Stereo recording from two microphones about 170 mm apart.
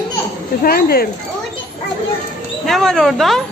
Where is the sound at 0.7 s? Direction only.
60° left (ahead or behind).